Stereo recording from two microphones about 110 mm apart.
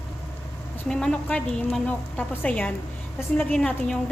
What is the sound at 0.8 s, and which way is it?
A woman's voice, 5° left (ahead or behind).